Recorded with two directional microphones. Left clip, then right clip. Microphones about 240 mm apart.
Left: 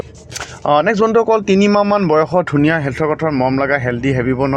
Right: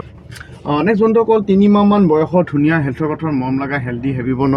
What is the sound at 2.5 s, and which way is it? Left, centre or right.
Speech, centre.